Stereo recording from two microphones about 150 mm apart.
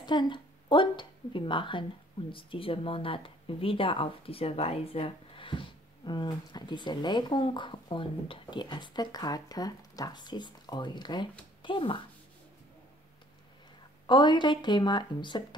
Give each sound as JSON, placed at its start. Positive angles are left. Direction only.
{"t": 0.0, "sound": "a woman's voice", "side_deg": 30}
{"t": 14.0, "sound": "a woman's voice", "side_deg": 30}